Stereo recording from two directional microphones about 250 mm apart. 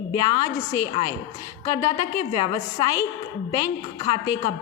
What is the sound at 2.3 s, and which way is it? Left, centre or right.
Speech, centre.